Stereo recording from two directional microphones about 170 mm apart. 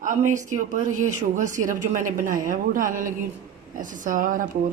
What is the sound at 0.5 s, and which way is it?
A woman's voice, 45° right (ahead or behind).